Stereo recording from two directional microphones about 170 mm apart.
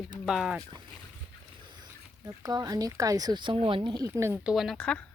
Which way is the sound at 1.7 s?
25° right (ahead or behind).